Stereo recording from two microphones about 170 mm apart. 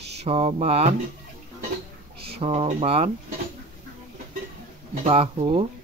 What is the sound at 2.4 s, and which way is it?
Speech, 35° right (ahead or behind).